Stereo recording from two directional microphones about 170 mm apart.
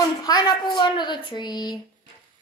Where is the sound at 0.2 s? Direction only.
25° left (ahead or behind).